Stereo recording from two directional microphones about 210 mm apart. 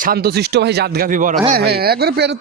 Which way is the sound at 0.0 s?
45° right (ahead or behind).